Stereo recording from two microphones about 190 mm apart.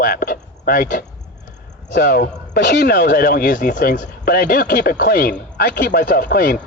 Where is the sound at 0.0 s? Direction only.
50° left (ahead or behind).